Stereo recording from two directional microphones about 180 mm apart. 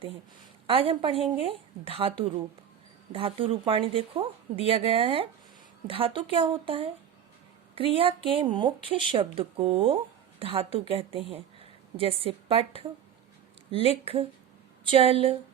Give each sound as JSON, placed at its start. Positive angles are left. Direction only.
{"t": 0.7, "sound": "a woman's voice", "side_deg": -30}